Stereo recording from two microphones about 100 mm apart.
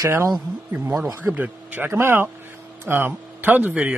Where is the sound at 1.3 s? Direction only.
15° right (ahead or behind).